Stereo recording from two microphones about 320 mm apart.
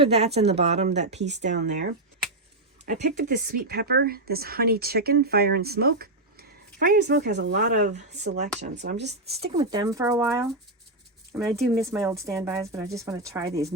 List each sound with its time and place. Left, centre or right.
0.0 s speech: centre
9.0 s a woman's voice: centre